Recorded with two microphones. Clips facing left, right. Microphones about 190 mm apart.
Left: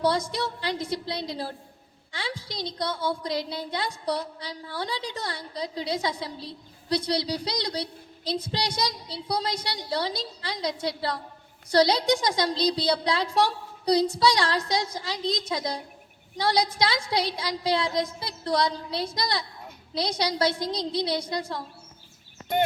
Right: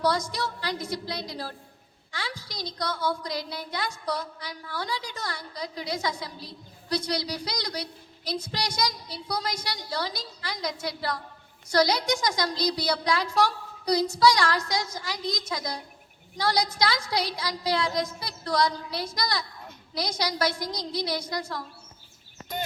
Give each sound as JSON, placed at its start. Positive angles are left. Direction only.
{"t": 0.0, "sound": "a woman's voice", "side_deg": 25}